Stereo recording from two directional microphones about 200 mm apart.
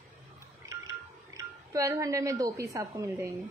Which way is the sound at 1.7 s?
15° right (ahead or behind).